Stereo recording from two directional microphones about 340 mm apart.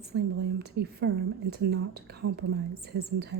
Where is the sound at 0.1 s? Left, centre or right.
Right.